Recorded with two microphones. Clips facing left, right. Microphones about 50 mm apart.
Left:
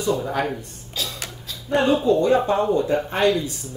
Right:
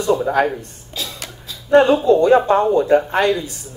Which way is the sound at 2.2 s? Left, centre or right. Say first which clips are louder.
Right 5 dB; right.